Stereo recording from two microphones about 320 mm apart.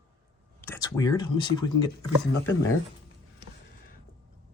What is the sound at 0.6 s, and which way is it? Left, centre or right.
Speech, centre.